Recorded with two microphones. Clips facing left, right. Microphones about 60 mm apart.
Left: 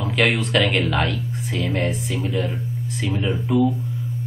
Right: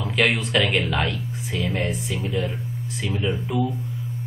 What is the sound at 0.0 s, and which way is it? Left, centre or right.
Speech, centre.